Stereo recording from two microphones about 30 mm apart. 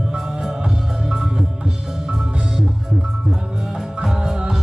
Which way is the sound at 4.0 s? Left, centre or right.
Centre.